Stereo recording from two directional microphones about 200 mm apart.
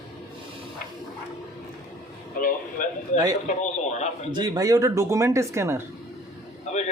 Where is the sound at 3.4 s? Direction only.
35° left (ahead or behind).